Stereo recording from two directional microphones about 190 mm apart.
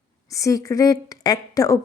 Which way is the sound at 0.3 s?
15° left (ahead or behind).